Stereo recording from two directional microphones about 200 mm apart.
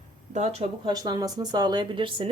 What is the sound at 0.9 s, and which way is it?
Speech, 20° right (ahead or behind).